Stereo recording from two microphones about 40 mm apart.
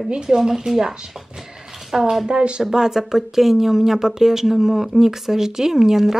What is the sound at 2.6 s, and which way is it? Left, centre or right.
Speech, centre.